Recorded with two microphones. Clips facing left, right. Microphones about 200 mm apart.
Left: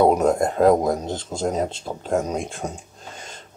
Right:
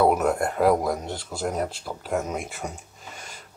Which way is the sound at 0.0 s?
20° left (ahead or behind).